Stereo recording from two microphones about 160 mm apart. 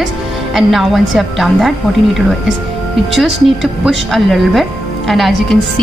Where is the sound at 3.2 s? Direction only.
Centre (ahead or behind).